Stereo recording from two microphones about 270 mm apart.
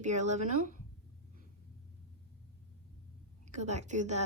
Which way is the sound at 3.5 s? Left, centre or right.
Right.